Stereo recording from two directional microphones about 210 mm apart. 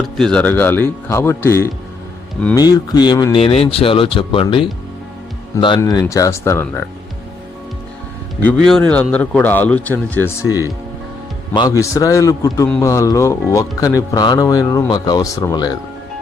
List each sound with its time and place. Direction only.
0.2 s speech: 5° left (ahead or behind)
8.4 s speech: 5° left (ahead or behind)
11.5 s speech: 15° left (ahead or behind)